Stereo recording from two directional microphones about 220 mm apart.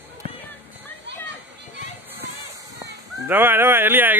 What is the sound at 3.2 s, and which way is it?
Speech, 10° right (ahead or behind).